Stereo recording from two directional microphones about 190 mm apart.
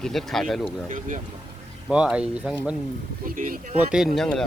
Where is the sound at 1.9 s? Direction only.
5° right (ahead or behind).